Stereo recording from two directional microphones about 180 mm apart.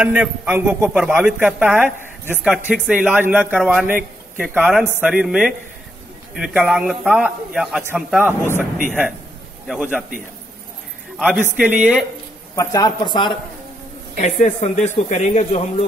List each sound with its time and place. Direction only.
0.0 s a man's voice: 5° right (ahead or behind)
9.7 s a man's voice: 10° right (ahead or behind)
11.1 s a man's voice: 5° right (ahead or behind)
12.5 s speech: 20° left (ahead or behind)
14.2 s a man's voice: 40° left (ahead or behind)